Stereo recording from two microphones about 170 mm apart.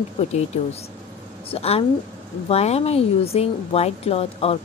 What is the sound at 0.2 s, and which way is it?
Speech, 40° left (ahead or behind).